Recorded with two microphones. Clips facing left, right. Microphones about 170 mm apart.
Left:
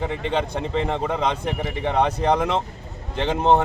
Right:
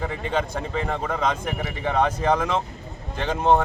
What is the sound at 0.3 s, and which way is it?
A man's voice, 25° left (ahead or behind).